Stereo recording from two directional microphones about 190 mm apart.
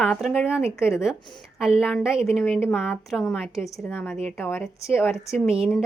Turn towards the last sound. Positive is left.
turn(degrees=-5)  # may be behind; listen again after turning